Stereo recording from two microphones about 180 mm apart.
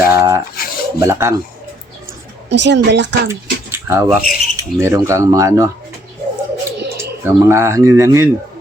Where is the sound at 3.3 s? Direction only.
15° right (ahead or behind).